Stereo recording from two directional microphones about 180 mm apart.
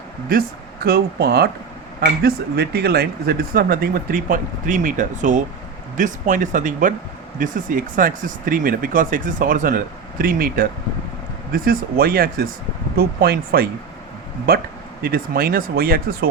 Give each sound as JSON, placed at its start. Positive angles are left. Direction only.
{"t": 0.3, "sound": "speech", "side_deg": -55}